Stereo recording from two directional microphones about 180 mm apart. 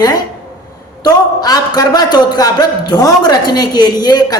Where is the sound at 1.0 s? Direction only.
20° left (ahead or behind).